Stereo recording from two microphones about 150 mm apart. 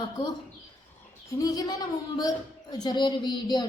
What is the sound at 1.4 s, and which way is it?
Speech, 25° left (ahead or behind).